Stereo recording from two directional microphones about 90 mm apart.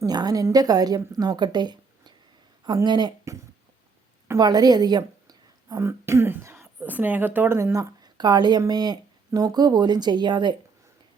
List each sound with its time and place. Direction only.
0.0 s a woman's voice: 45° right (ahead or behind)
4.4 s a woman's voice: 45° right (ahead or behind)
5.8 s speech: 30° right (ahead or behind); by 10.5 s 55° right (ahead or behind)